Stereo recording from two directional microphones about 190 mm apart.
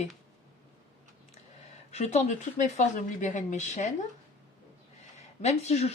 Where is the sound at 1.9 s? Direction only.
35° left (ahead or behind).